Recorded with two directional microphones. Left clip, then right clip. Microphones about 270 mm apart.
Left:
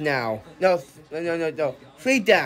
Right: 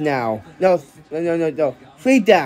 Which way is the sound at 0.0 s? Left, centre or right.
Centre.